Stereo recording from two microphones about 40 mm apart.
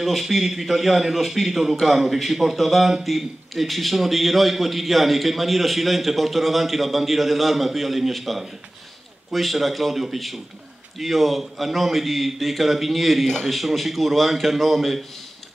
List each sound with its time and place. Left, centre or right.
0.0 s a man's voice: centre